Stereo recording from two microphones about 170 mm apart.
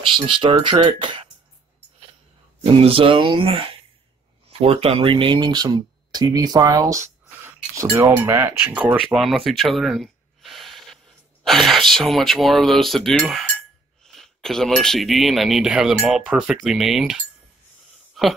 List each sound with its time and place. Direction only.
0.0 s speech: 30° right (ahead or behind)
2.6 s speech: 35° right (ahead or behind); by 7.8 s 20° right (ahead or behind)
7.9 s cutlery: 20° right (ahead or behind)
9.1 s a sound: centre (ahead or behind)
11.4 s speech: centre (ahead or behind)